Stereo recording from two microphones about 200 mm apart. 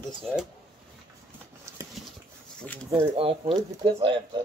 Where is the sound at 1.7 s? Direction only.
15° right (ahead or behind).